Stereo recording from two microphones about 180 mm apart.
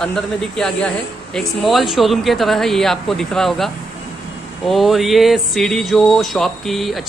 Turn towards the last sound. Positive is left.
turn(degrees=0)  # may be behind; listen again after turning